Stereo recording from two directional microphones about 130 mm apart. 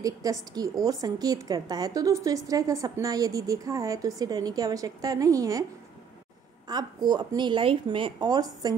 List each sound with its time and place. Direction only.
0.0 s a woman's voice: 25° right (ahead or behind)
6.7 s speech: 30° right (ahead or behind)